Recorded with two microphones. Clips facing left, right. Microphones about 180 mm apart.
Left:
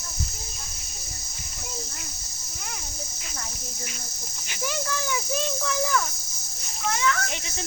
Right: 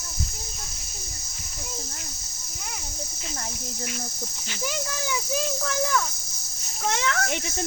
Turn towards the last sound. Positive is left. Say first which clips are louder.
# even
turn(degrees=-75)  # may be behind; listen again after turning